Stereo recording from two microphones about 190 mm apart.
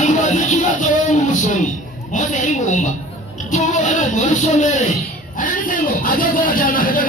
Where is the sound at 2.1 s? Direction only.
40° left (ahead or behind).